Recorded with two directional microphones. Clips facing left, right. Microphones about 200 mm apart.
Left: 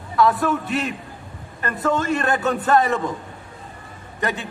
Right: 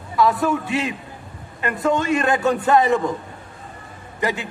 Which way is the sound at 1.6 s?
20° right (ahead or behind).